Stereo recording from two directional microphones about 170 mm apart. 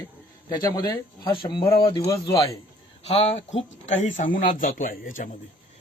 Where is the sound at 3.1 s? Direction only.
35° left (ahead or behind).